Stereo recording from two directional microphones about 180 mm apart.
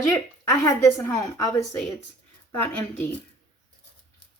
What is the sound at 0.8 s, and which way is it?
A woman's voice, 15° left (ahead or behind).